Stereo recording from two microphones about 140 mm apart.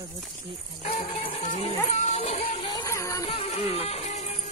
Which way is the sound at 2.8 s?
20° left (ahead or behind).